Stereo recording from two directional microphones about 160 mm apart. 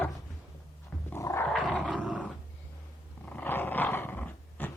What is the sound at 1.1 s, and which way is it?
Dog, 15° left (ahead or behind).